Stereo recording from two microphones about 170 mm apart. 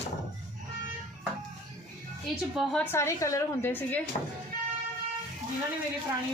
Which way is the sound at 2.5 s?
5° left (ahead or behind).